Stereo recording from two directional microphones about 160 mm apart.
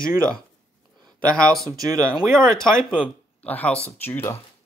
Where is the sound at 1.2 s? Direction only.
5° left (ahead or behind).